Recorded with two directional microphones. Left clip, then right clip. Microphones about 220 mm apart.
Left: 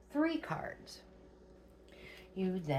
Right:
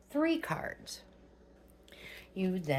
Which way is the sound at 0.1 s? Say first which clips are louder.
Right 3 dB; 55° right (ahead or behind).